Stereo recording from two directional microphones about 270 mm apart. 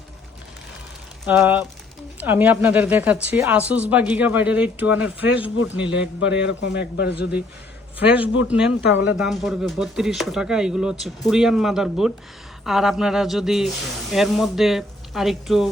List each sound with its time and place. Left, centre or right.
1.2 s a woman's voice: centre
6.1 s a man's voice: left
7.9 s a woman's voice: centre